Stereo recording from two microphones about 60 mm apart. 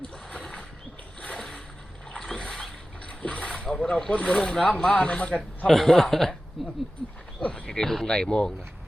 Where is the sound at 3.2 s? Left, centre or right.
Centre.